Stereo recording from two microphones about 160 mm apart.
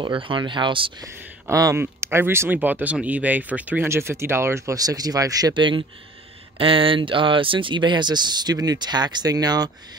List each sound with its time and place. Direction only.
0.0 s speech: 30° right (ahead or behind)
1.0 s speech: 20° right (ahead or behind)